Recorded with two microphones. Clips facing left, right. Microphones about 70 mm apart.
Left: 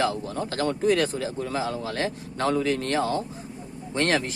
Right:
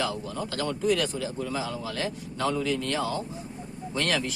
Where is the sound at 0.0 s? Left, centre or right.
Left.